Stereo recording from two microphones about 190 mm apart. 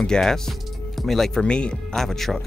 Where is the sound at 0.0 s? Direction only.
5° left (ahead or behind).